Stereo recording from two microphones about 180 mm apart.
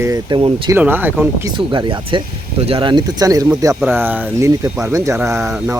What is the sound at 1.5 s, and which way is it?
Speech, 25° right (ahead or behind).